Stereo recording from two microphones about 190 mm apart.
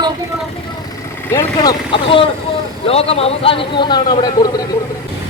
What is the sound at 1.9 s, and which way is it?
Speech, 30° left (ahead or behind).